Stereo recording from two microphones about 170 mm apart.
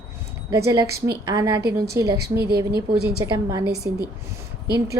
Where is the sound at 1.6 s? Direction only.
70° right (ahead or behind).